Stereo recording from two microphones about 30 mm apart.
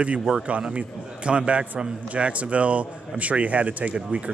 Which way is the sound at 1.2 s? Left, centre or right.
Right.